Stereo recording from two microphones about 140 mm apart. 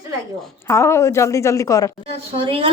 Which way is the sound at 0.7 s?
20° left (ahead or behind).